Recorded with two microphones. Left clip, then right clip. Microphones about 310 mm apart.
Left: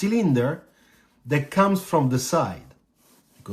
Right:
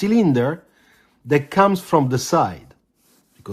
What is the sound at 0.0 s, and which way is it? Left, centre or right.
Speech, centre.